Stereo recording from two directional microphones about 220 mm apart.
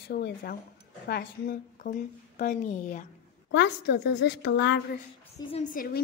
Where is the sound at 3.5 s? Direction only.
50° left (ahead or behind).